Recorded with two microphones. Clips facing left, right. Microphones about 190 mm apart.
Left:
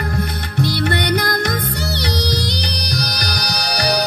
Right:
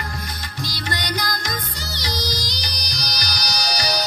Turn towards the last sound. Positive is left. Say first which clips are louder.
# left 5 dB
turn(degrees=60)  # may be behind; listen again after turning